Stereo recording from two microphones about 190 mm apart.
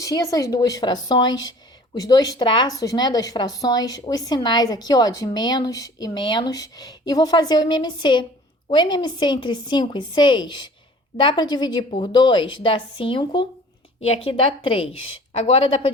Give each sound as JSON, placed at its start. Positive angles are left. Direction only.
{"t": 0.0, "sound": "a woman's voice", "side_deg": 20}